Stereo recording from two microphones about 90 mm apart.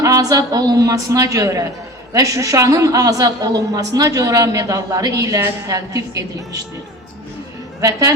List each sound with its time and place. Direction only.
0.0 s a woman's voice: 40° right (ahead or behind)
7.8 s a woman's voice: 40° right (ahead or behind)